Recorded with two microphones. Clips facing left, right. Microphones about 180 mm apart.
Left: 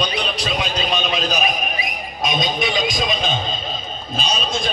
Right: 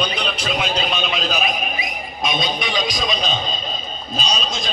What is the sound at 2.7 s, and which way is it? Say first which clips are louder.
A man's voice: left 1 dB; 50° left (ahead or behind).